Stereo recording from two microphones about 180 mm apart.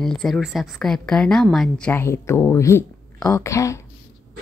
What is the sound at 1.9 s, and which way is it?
Speech, 15° left (ahead or behind).